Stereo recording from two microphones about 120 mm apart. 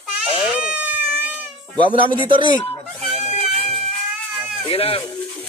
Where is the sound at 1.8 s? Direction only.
45° right (ahead or behind).